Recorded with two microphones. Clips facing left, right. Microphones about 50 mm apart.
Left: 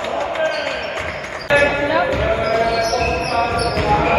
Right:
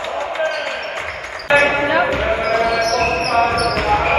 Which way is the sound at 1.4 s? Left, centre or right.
Right.